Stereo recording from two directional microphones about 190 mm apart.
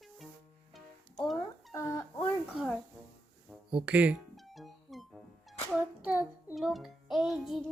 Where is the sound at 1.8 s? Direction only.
15° left (ahead or behind).